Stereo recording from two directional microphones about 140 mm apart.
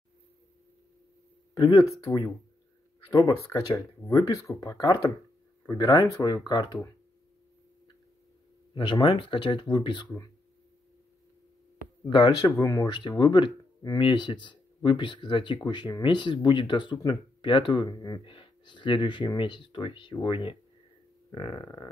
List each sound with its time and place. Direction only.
1.5 s speech: 30° left (ahead or behind)
8.7 s speech: 35° left (ahead or behind)
12.0 s speech: 30° left (ahead or behind)
21.3 s a sound: 30° left (ahead or behind)